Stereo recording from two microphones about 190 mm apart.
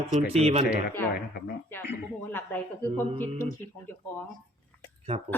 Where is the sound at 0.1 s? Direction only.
35° right (ahead or behind).